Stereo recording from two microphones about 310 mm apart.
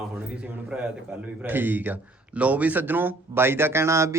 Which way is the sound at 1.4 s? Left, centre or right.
Centre.